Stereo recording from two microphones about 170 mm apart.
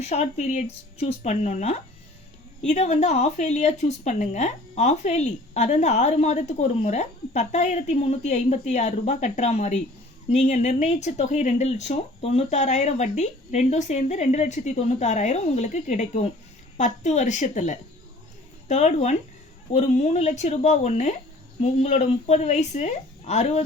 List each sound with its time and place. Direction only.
0.0 s speech: 40° left (ahead or behind)